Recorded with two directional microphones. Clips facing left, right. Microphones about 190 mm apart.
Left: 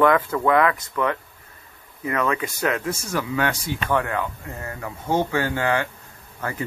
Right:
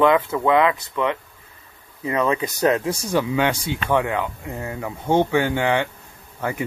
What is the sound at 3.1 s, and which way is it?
Speech, 20° right (ahead or behind).